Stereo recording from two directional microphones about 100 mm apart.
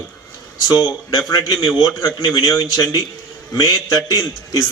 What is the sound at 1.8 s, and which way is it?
A man's voice, 35° left (ahead or behind).